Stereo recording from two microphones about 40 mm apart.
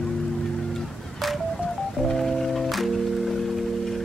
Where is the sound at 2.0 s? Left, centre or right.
Centre.